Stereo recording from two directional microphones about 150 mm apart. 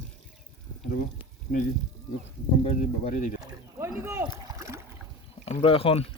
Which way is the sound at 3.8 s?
15° right (ahead or behind).